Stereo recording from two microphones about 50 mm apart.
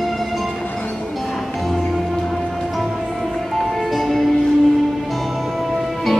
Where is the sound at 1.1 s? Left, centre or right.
Centre.